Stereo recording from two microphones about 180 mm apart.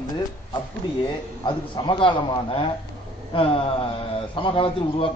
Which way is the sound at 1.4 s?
25° left (ahead or behind).